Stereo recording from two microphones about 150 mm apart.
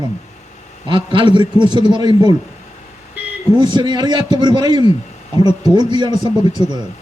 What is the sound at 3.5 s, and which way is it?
A man's voice, 30° right (ahead or behind).